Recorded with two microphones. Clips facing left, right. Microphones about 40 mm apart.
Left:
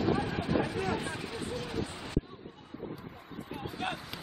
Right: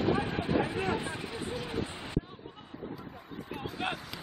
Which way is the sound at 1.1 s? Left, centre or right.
Right.